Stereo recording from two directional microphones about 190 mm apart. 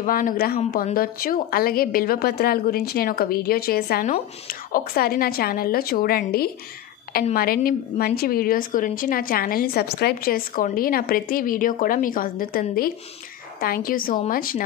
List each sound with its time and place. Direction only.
0.0 s a woman's voice: 45° left (ahead or behind)